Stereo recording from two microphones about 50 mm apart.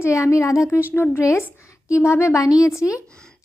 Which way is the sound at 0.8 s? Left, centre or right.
Left.